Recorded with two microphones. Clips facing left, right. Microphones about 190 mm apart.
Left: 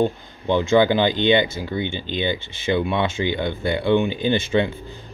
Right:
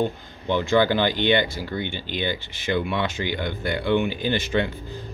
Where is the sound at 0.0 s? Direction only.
20° left (ahead or behind).